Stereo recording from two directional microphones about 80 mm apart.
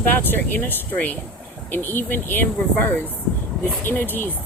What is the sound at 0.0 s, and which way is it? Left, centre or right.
Speech, left.